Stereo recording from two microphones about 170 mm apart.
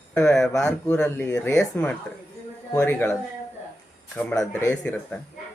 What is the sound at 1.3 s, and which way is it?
Speech, 15° left (ahead or behind).